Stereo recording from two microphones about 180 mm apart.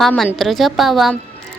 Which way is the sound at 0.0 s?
5° left (ahead or behind).